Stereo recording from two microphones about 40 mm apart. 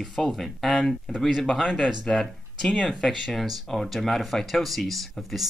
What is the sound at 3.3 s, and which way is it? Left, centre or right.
Speech, centre.